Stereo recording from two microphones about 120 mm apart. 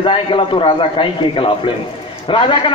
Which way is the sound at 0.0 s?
45° left (ahead or behind).